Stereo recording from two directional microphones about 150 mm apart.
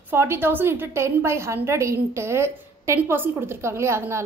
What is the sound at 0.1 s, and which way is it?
A woman's voice, 15° right (ahead or behind).